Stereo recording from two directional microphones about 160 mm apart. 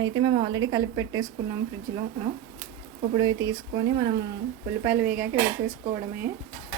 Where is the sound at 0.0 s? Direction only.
30° right (ahead or behind).